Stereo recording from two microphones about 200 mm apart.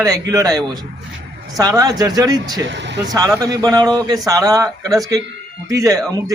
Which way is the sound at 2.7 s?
60° right (ahead or behind).